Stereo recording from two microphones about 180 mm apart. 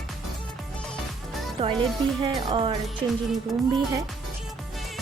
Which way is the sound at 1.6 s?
30° right (ahead or behind).